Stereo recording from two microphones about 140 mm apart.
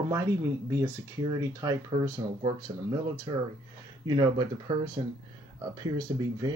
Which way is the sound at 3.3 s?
30° right (ahead or behind).